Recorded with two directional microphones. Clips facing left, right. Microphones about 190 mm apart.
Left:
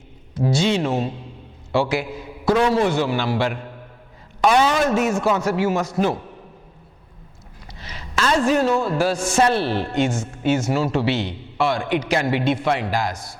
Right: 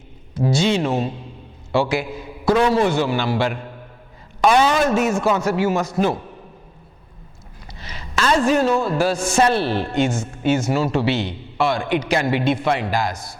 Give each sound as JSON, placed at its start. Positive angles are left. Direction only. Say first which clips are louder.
{"t": 0.4, "sound": "a man's voice", "louder": "right 1 dB", "side_deg": -10}
{"t": 4.5, "sound": "speech", "louder": "right 1 dB", "side_deg": -35}
{"t": 4.8, "sound": "a man's voice", "louder": "right 1 dB", "side_deg": -10}
{"t": 7.8, "sound": "a man's voice", "louder": "right 1 dB", "side_deg": -15}